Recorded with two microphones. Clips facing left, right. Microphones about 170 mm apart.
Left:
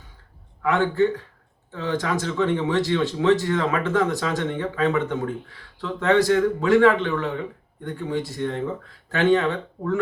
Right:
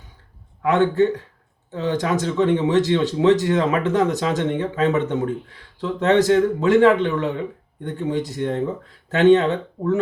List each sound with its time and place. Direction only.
0.6 s speech: 20° right (ahead or behind)